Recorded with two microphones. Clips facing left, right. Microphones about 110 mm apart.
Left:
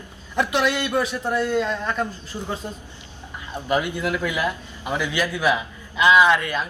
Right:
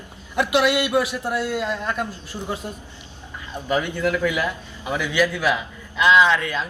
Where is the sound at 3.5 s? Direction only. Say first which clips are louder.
Even; 15° left (ahead or behind).